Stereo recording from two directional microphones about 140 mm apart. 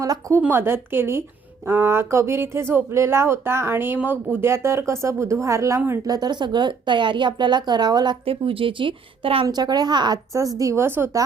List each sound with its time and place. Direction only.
0.0 s a woman's voice: 20° right (ahead or behind)